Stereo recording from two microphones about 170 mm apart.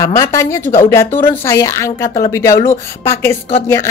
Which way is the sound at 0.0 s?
15° left (ahead or behind).